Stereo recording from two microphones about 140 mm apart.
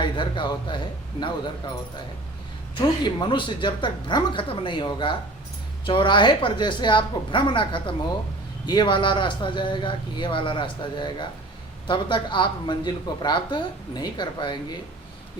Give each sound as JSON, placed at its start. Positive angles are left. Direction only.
{"t": 0.0, "sound": "speech", "side_deg": 35}
{"t": 2.7, "sound": "speech", "side_deg": 35}